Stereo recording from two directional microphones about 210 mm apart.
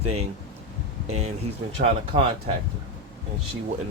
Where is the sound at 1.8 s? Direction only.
30° right (ahead or behind).